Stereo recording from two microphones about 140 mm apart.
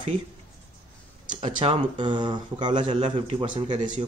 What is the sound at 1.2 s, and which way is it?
Speech, 35° right (ahead or behind).